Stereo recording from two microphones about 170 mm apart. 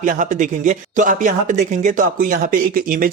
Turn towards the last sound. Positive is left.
turn(degrees=-55)  # may be behind; listen again after turning